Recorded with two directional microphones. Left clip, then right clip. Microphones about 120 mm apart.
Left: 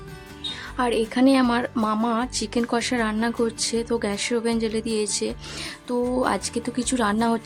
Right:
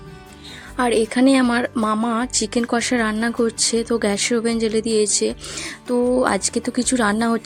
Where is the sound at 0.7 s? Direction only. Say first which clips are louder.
Right 5 dB; 35° right (ahead or behind).